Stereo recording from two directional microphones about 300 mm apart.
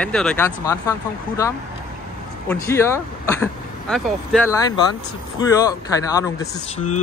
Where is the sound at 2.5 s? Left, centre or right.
Centre.